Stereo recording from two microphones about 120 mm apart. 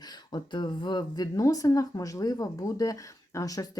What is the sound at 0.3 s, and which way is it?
Speech, 40° left (ahead or behind).